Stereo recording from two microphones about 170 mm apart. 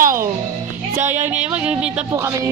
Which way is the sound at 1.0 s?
45° right (ahead or behind).